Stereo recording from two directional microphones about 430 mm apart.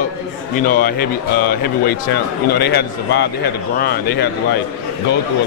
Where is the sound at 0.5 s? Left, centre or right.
Centre.